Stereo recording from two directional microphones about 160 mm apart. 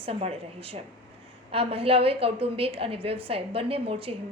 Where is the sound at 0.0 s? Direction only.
40° right (ahead or behind).